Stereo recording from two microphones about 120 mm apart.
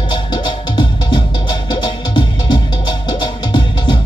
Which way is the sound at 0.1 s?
40° left (ahead or behind).